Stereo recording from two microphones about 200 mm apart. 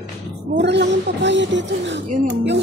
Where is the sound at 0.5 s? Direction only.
60° right (ahead or behind).